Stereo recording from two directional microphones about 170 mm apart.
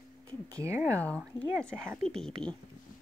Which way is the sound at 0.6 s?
15° right (ahead or behind).